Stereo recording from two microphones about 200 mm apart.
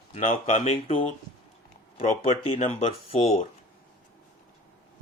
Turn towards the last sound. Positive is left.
turn(degrees=30)  # may be behind; listen again after turning